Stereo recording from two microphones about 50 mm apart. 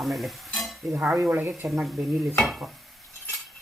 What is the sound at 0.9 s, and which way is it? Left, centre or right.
Speech, right.